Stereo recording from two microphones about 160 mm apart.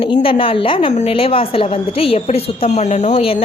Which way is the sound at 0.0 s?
35° left (ahead or behind).